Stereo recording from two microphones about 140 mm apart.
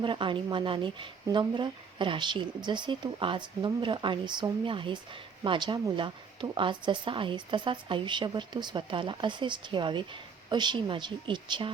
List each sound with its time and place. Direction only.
0.0 s speech: 35° right (ahead or behind)